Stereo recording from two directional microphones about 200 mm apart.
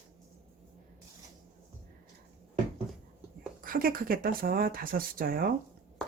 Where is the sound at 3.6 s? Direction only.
45° right (ahead or behind).